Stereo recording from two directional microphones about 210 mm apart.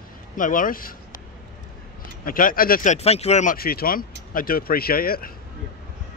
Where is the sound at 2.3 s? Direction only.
40° left (ahead or behind).